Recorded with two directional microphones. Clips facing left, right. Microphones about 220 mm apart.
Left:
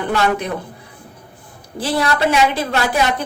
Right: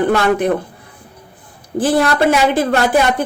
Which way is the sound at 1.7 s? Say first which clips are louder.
Right 5 dB; 50° right (ahead or behind).